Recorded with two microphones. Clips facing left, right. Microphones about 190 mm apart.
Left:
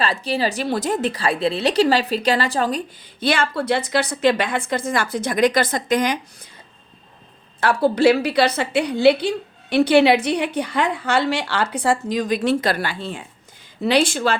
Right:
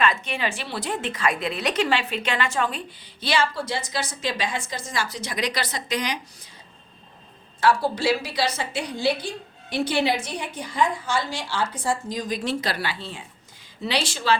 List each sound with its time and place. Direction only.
0.0 s a woman's voice: 35° left (ahead or behind); by 6.1 s 50° left (ahead or behind)
7.6 s a woman's voice: 60° left (ahead or behind)